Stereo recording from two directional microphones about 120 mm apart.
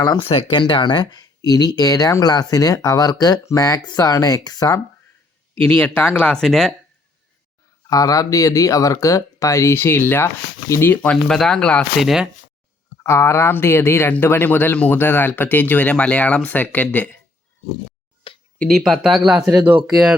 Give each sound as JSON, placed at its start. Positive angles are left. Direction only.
{"t": 0.2, "sound": "speech", "side_deg": 50}
{"t": 5.6, "sound": "speech", "side_deg": 15}
{"t": 7.9, "sound": "speech", "side_deg": 30}
{"t": 11.9, "sound": "speech", "side_deg": -5}
{"t": 13.0, "sound": "speech", "side_deg": 25}
{"t": 18.3, "sound": "a sound", "side_deg": 50}
{"t": 18.7, "sound": "speech", "side_deg": 0}
{"t": 19.5, "sound": "speech", "side_deg": -15}